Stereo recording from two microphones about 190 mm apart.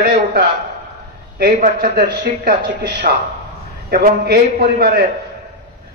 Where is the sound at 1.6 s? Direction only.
50° right (ahead or behind).